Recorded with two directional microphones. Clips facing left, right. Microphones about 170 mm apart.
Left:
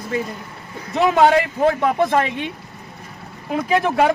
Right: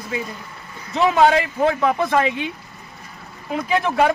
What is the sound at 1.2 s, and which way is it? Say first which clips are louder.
Speech: left 1 dB; centre (ahead or behind).